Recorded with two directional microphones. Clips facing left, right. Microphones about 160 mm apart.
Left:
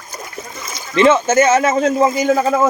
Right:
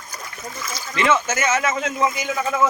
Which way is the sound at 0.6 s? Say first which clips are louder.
Left 10 dB; 25° left (ahead or behind).